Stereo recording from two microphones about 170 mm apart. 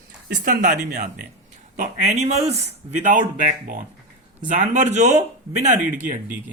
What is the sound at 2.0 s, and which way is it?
Speech, 40° right (ahead or behind).